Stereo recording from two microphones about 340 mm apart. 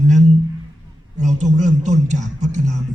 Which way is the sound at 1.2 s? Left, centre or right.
Right.